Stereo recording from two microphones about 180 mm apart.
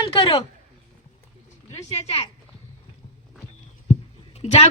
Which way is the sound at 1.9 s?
35° left (ahead or behind).